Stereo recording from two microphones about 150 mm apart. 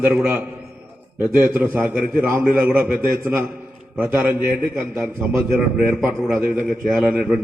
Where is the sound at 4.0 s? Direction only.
10° right (ahead or behind).